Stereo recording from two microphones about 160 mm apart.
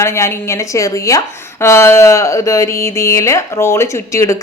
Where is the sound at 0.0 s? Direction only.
15° left (ahead or behind).